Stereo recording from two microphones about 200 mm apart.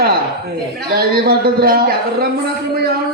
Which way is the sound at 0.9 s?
50° right (ahead or behind).